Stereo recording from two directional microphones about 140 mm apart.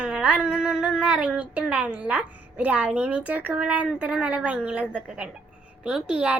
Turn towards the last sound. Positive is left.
turn(degrees=-5)  # may be behind; listen again after turning